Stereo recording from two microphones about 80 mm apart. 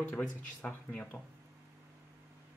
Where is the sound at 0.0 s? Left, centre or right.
Centre.